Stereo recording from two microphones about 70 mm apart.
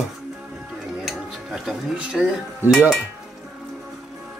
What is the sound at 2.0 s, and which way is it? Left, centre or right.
Speech, centre.